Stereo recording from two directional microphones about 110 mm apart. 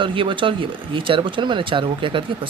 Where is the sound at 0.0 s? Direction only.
50° right (ahead or behind).